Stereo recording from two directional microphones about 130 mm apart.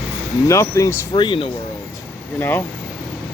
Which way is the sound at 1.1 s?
40° left (ahead or behind).